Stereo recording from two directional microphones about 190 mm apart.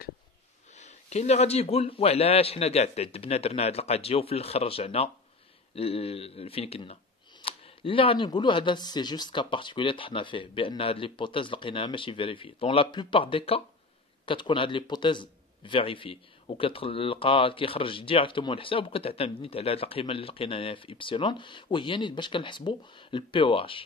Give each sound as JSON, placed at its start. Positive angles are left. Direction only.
{"t": 0.7, "sound": "a man's voice", "side_deg": 35}